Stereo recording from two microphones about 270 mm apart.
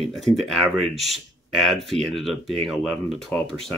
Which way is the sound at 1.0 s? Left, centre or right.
Centre.